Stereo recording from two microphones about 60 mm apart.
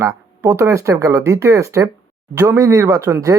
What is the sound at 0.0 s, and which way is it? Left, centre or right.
Speech, right.